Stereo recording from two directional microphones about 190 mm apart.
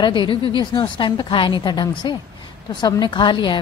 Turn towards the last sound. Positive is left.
turn(degrees=25)  # may be behind; listen again after turning